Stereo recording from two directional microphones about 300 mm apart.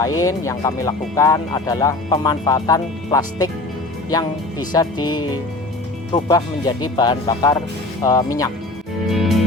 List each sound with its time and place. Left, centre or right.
0.0 s speech: centre
9.0 s music: centre